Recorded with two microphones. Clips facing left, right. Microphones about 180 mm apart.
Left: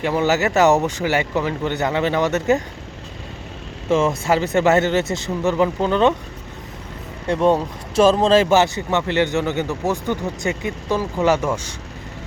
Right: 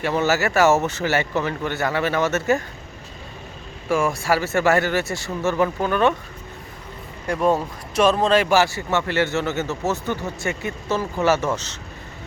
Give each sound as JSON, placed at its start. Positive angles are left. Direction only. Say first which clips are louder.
{"t": 0.0, "sound": "speech", "louder": "left 2 dB", "side_deg": 15}
{"t": 3.8, "sound": "speech", "louder": "left 3 dB", "side_deg": 20}
{"t": 7.3, "sound": "speech", "louder": "left 3 dB", "side_deg": 25}